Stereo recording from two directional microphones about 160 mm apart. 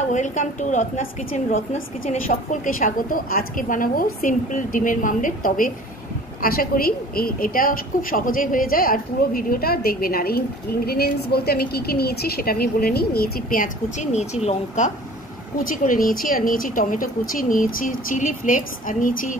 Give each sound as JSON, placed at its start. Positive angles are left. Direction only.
{"t": 0.1, "sound": "a woman's voice", "side_deg": 50}
{"t": 15.6, "sound": "a woman's voice", "side_deg": 60}